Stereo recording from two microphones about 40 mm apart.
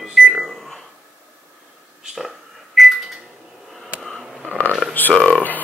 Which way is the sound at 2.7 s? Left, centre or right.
Centre.